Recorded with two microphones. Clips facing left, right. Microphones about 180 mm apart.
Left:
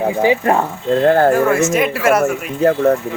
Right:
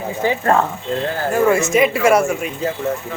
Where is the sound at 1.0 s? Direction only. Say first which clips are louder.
Left 14 dB; 55° left (ahead or behind).